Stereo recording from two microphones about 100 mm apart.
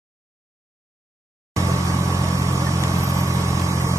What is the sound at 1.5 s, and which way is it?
Vehicle, 30° right (ahead or behind).